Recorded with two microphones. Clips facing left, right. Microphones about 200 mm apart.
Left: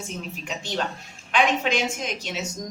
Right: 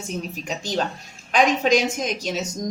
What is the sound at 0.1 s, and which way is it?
Speech, 40° right (ahead or behind).